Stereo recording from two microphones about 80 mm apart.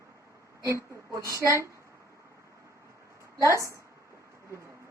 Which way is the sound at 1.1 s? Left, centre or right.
Right.